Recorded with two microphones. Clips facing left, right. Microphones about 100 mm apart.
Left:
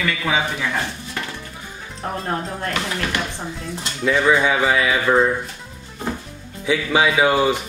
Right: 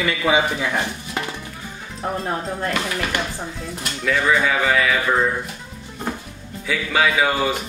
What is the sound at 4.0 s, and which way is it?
Speech, 20° left (ahead or behind).